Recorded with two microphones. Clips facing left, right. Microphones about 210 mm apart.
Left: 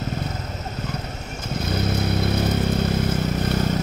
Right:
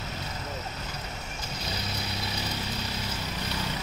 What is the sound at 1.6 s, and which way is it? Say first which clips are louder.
Vehicle: left 13 dB; 55° left (ahead or behind).